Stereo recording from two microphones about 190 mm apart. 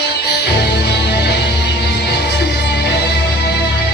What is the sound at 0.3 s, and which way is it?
Music, 60° left (ahead or behind).